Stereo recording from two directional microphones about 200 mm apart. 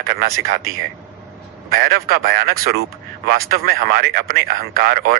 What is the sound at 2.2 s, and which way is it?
Speech, 50° right (ahead or behind).